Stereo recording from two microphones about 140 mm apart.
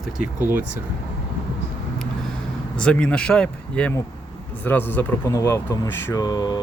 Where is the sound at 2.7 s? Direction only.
5° left (ahead or behind); by 6.6 s 30° left (ahead or behind).